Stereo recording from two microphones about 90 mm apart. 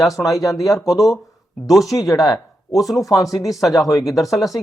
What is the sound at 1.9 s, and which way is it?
Speech, 40° left (ahead or behind).